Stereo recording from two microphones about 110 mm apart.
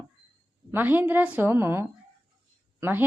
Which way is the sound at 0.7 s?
20° right (ahead or behind).